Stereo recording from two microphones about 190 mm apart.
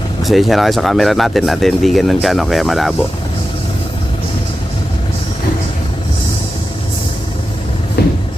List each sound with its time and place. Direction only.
0.2 s speech: centre (ahead or behind)
8.0 s vehicle: 60° left (ahead or behind)